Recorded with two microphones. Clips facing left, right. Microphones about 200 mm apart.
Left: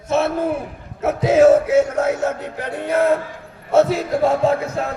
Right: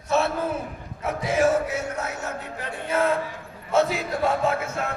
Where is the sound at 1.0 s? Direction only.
80° left.